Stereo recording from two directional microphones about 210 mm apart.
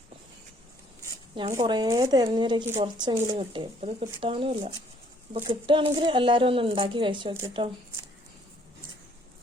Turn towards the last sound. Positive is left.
turn(degrees=-20)  # may be behind; listen again after turning